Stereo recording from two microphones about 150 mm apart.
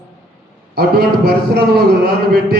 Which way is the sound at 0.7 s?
90° right.